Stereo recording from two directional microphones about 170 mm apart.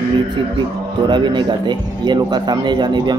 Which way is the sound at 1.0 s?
25° right (ahead or behind).